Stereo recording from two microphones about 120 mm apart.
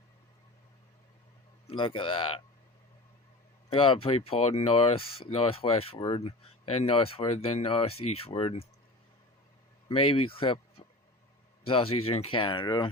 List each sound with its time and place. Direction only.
1.6 s speech: 45° left (ahead or behind)
3.7 s speech: 45° left (ahead or behind)
9.9 s speech: 50° left (ahead or behind)